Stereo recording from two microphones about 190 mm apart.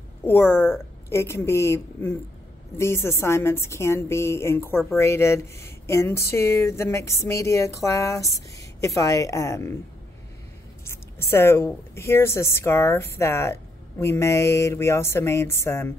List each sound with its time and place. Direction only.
0.2 s a woman's voice: 10° left (ahead or behind)
10.8 s a woman's voice: 15° left (ahead or behind)